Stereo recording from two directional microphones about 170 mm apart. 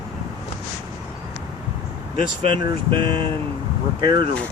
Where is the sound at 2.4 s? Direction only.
30° right (ahead or behind).